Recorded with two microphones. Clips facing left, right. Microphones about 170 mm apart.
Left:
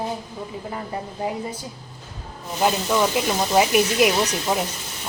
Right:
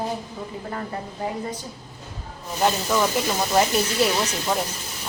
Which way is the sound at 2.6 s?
5° left (ahead or behind).